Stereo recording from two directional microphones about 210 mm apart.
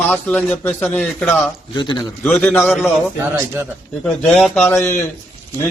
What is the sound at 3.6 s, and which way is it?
Speech, 10° right (ahead or behind).